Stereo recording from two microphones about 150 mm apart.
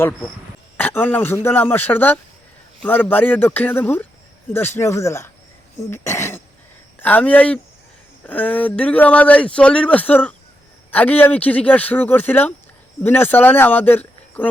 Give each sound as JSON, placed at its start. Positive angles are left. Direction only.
{"t": 0.8, "sound": "speech", "side_deg": 15}